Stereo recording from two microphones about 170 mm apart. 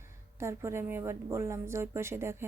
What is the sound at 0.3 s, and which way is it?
A woman's voice, 15° right (ahead or behind).